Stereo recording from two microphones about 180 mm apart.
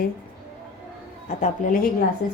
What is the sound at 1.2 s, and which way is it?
Speech, 45° left (ahead or behind).